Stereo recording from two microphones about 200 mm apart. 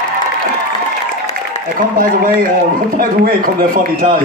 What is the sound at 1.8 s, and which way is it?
A man's voice, 45° right (ahead or behind).